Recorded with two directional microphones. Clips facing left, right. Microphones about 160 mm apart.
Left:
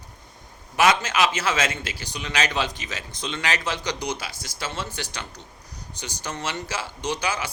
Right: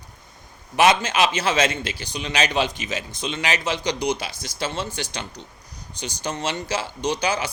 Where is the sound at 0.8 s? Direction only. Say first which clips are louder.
Right 2 dB; 20° right (ahead or behind).